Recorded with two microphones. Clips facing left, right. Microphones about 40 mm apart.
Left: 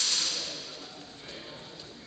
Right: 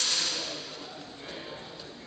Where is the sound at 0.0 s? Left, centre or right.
Centre.